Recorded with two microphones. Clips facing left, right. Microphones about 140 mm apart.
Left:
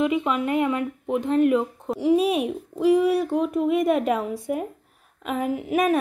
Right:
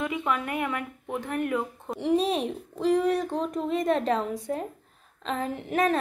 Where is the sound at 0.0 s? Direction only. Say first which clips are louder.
Left 6 dB; 20° left (ahead or behind).